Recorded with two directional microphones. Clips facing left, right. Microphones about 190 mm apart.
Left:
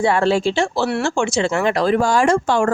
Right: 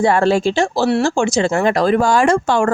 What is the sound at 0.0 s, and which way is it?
Speech, 45° right (ahead or behind).